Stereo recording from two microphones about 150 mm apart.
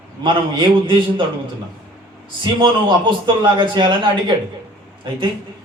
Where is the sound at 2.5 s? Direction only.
30° right (ahead or behind).